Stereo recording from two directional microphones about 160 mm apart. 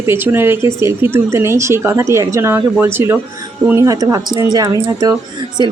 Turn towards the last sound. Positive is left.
turn(degrees=-25)  # may be behind; listen again after turning